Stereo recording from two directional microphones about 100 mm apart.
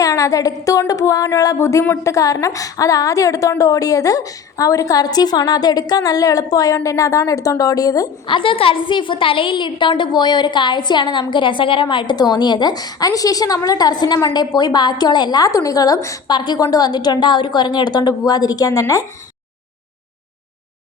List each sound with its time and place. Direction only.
0.0 s a woman's voice: 35° left (ahead or behind)
8.3 s a woman's voice: 60° left (ahead or behind); by 19.0 s 35° left (ahead or behind)